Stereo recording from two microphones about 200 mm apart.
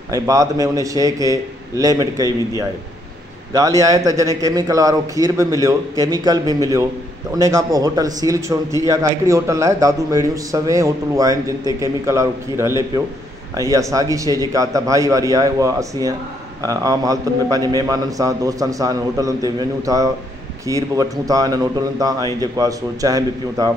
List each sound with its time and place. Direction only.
0.1 s a man's voice: 15° right (ahead or behind)
3.5 s a man's voice: 15° right (ahead or behind)